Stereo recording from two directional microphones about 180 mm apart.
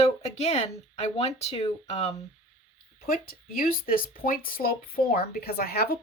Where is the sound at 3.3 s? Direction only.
55° left (ahead or behind).